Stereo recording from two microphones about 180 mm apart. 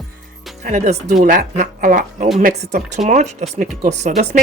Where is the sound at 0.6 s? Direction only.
40° right (ahead or behind).